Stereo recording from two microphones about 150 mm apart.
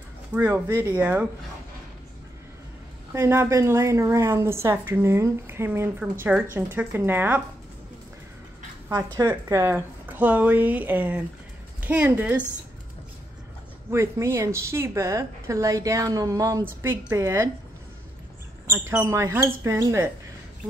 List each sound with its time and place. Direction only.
0.3 s speech: 15° right (ahead or behind)
3.1 s a woman's voice: 15° right (ahead or behind)
8.9 s a woman's voice: 30° right (ahead or behind)
9.3 s speech: 15° right (ahead or behind)
13.8 s a woman's voice: 20° right (ahead or behind)
18.7 s a woman's voice: 15° right (ahead or behind)